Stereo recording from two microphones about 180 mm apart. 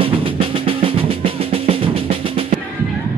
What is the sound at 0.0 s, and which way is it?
Drum, 30° right (ahead or behind).